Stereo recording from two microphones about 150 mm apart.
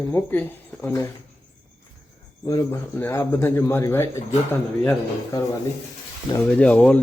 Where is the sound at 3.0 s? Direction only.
15° left (ahead or behind).